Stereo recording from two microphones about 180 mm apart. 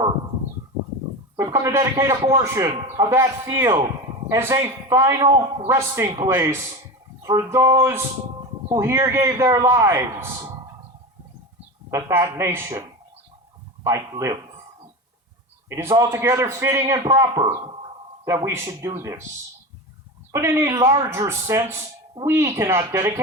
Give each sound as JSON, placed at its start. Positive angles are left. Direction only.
{"t": 1.4, "sound": "a man's voice", "side_deg": -20}
{"t": 11.9, "sound": "a man's voice", "side_deg": -15}
{"t": 13.8, "sound": "a man's voice", "side_deg": -15}
{"t": 15.7, "sound": "a man's voice", "side_deg": -15}
{"t": 20.3, "sound": "a man's voice", "side_deg": -15}